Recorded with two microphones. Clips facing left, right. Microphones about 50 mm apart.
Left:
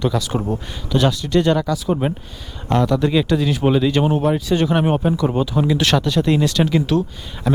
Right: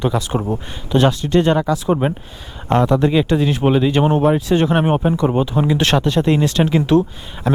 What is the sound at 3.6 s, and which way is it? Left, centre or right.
Speech, centre.